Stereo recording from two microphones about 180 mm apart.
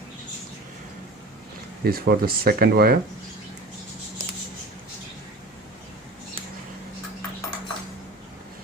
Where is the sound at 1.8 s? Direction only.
60° right (ahead or behind).